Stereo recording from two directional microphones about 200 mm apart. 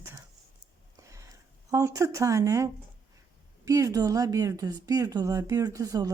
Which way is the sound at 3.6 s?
15° right (ahead or behind).